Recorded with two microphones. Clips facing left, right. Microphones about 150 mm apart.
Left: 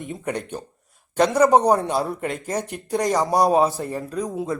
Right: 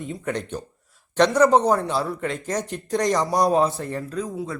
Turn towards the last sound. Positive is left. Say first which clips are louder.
# left 3 dB
turn(degrees=20)  # may be behind; listen again after turning